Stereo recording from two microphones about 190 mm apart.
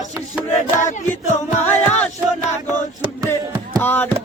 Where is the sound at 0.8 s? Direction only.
40° left (ahead or behind).